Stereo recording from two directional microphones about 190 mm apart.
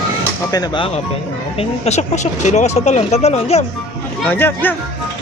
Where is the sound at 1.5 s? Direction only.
35° left (ahead or behind).